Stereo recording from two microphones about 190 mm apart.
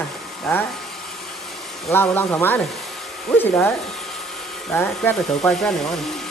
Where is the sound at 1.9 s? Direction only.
15° left (ahead or behind).